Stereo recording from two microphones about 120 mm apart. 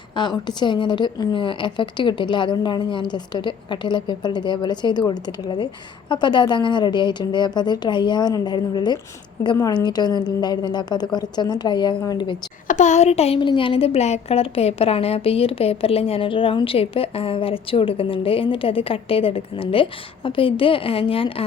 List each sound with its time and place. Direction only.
0.2 s a woman's voice: 40° left (ahead or behind)
12.6 s speech: 90° left; by 21.4 s 50° left (ahead or behind)